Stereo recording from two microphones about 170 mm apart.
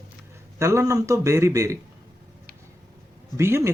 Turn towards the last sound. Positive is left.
turn(degrees=-15)  # may be behind; listen again after turning